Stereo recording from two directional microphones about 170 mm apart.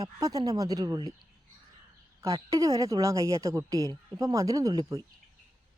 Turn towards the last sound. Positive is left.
turn(degrees=-20)  # may be behind; listen again after turning